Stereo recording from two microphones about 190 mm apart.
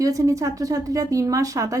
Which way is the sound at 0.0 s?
15° right (ahead or behind).